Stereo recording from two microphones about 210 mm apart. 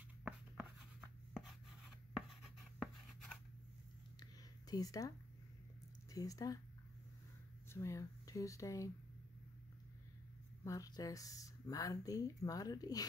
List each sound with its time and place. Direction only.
1.3 s writing: centre (ahead or behind)
4.2 s a sound: 20° left (ahead or behind)
6.1 s speech: 15° left (ahead or behind)
7.7 s speech: 15° left (ahead or behind)
10.6 s speech: 15° left (ahead or behind)